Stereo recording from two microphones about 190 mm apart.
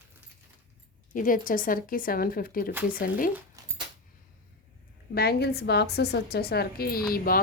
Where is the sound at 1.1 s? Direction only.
45° left (ahead or behind).